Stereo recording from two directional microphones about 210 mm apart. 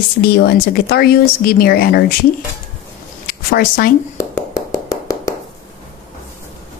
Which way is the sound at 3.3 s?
45° left (ahead or behind).